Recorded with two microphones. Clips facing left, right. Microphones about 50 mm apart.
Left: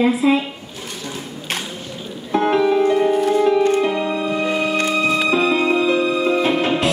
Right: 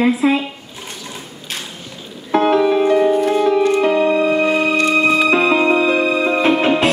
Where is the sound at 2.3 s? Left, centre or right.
Right.